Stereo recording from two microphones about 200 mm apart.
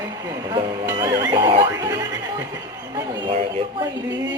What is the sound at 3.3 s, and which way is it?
Speech, 25° right (ahead or behind).